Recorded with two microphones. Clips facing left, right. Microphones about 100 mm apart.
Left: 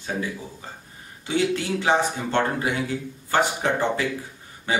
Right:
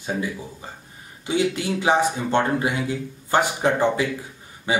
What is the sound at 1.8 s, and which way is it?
A man's voice, 15° right (ahead or behind).